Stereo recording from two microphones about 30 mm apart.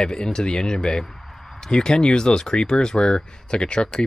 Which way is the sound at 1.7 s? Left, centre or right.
Left.